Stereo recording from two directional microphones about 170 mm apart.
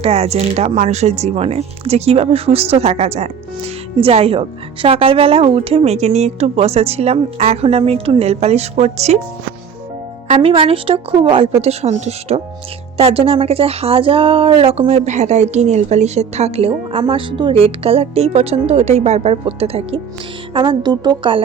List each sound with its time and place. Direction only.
0.0 s speech: 35° right (ahead or behind)
10.2 s a woman's voice: 35° right (ahead or behind)